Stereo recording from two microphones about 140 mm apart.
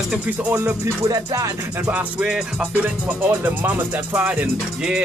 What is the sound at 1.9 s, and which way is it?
Music, 10° right (ahead or behind).